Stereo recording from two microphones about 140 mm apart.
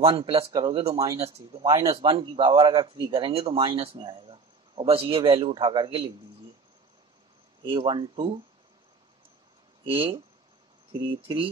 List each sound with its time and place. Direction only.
0.0 s speech: 40° right (ahead or behind)
1.9 s speech: 40° right (ahead or behind)
7.6 s speech: 35° right (ahead or behind)
9.8 s speech: 40° right (ahead or behind)